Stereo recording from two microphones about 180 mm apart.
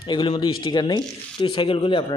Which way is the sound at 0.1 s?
25° left (ahead or behind).